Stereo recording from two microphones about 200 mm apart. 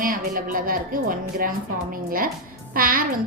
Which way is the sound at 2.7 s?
45° right (ahead or behind).